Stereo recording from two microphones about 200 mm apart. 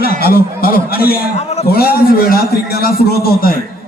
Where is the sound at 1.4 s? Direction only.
30° left (ahead or behind).